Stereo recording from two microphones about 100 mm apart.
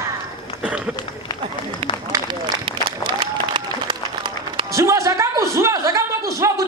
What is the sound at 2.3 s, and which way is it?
Applause, 55° right (ahead or behind).